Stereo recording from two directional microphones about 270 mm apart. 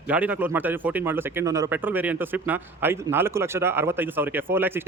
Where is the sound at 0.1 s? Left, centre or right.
Centre.